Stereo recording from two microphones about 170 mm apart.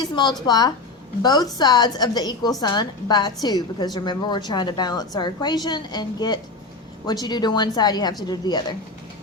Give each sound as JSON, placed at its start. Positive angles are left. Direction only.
{"t": 0.0, "sound": "a woman's voice", "side_deg": 25}